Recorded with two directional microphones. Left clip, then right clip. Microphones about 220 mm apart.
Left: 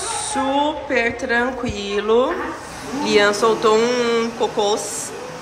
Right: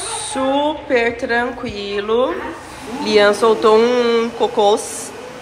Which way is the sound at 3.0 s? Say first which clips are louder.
Right 3 dB; 5° left (ahead or behind).